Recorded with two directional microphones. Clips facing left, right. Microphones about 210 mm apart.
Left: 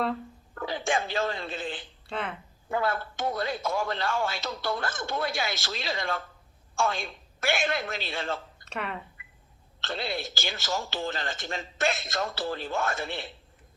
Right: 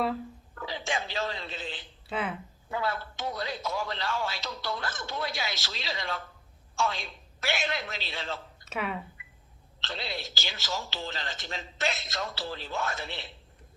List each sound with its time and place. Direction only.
0.5 s speech: 50° left (ahead or behind)
2.0 s speech: 5° right (ahead or behind)
2.6 s a man's voice: 50° left (ahead or behind)
8.6 s speech: 5° right (ahead or behind)
9.8 s speech: 50° left (ahead or behind)